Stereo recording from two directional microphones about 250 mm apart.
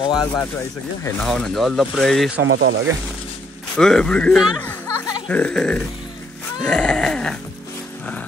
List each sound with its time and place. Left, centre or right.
0.2 s speech: centre
2.4 s speech: right
3.7 s speech: centre